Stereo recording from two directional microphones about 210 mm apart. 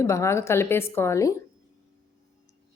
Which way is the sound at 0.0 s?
15° left (ahead or behind).